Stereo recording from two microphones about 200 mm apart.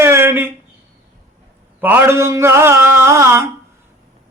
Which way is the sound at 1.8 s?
10° right (ahead or behind).